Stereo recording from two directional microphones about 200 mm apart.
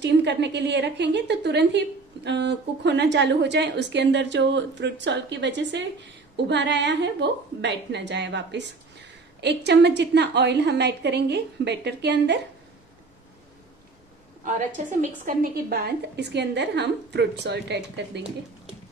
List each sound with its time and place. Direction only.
0.0 s a woman's voice: 60° right (ahead or behind)
15.0 s a woman's voice: 45° right (ahead or behind)